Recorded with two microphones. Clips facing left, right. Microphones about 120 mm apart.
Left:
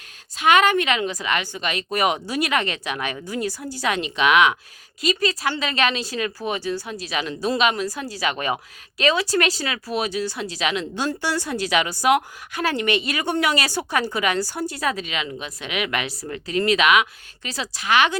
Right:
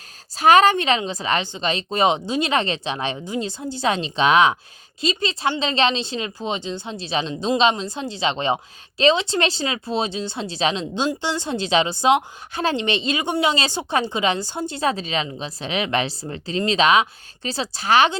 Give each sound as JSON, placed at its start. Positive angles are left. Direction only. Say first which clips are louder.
{"t": 0.3, "sound": "speech", "louder": "right 3 dB", "side_deg": -35}